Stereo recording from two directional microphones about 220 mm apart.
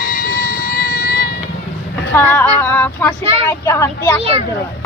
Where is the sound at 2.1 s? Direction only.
10° left (ahead or behind).